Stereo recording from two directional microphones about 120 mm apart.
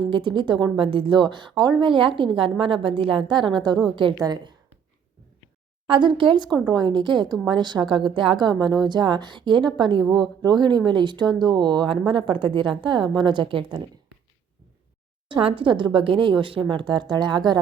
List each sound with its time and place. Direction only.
0.0 s a woman's voice: 45° right (ahead or behind)
5.9 s speech: 40° right (ahead or behind)
15.3 s a woman's voice: 45° right (ahead or behind)